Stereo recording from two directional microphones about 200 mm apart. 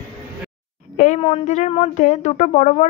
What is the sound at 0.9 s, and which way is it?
Speech, 35° left (ahead or behind).